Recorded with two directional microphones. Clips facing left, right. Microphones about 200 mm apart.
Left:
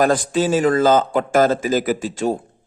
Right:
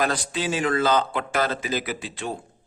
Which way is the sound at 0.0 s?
50° left (ahead or behind).